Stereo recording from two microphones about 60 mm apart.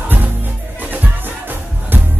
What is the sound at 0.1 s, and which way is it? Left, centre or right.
Music, right.